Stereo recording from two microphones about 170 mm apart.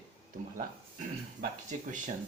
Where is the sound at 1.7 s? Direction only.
50° right (ahead or behind).